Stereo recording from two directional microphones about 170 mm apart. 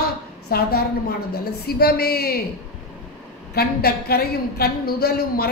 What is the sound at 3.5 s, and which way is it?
A woman's voice, 65° left (ahead or behind).